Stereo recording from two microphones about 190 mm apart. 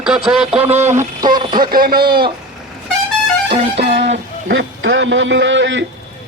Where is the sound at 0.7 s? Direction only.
35° right (ahead or behind).